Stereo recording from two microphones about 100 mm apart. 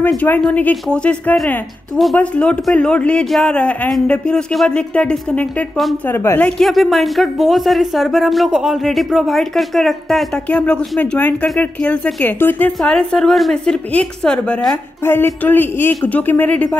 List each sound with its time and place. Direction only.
0.5 s speech: 15° left (ahead or behind)
6.4 s speech: centre (ahead or behind); by 12.9 s 20° left (ahead or behind)
12.9 s speech: 5° left (ahead or behind)
15.0 s speech: 20° left (ahead or behind)